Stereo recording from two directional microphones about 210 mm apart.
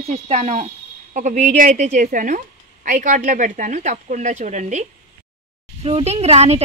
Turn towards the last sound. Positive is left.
turn(degrees=-30)  # may be behind; listen again after turning